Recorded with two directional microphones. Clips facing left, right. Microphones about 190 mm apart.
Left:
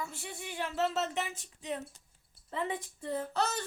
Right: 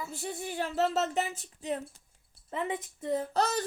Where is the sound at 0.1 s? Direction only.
35° right (ahead or behind).